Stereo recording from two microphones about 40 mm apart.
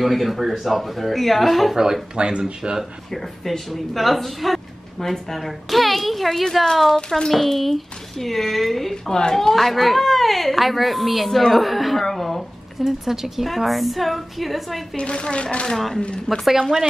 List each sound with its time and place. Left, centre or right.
0.0 s a woman's voice: centre
2.1 s speech: right
3.1 s a woman's voice: centre
12.8 s a woman's voice: centre
15.0 s speech: left
16.3 s a woman's voice: centre